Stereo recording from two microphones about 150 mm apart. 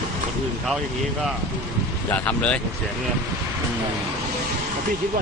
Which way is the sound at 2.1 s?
10° left (ahead or behind).